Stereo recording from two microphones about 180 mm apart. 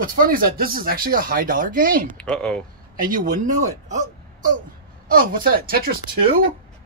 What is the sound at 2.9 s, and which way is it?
Speech, 50° right (ahead or behind).